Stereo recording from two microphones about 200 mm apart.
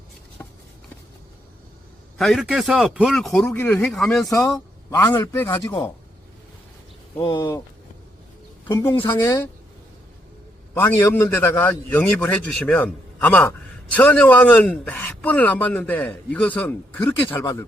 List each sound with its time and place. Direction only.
0.4 s a sound: 15° left (ahead or behind)
2.1 s a man's voice: centre (ahead or behind)
4.9 s a man's voice: 15° left (ahead or behind)
7.2 s a man's voice: 20° left (ahead or behind)
8.6 s a man's voice: 15° left (ahead or behind)
10.8 s a man's voice: 10° left (ahead or behind)